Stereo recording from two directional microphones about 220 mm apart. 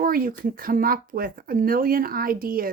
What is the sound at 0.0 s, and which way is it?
A woman's voice, 40° right (ahead or behind).